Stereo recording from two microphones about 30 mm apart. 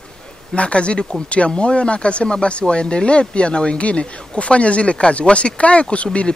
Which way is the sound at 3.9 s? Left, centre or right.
Left.